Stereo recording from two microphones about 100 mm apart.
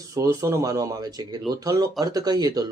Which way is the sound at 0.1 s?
30° right (ahead or behind).